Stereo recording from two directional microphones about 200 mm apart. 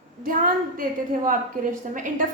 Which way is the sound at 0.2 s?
45° right (ahead or behind).